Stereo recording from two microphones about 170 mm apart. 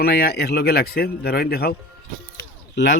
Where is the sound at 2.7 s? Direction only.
90° left.